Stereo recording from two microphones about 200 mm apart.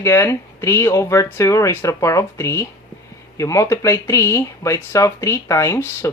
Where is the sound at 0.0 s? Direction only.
15° left (ahead or behind).